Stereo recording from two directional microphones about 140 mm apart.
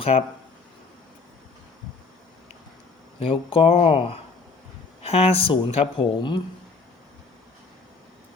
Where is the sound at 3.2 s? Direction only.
40° left (ahead or behind).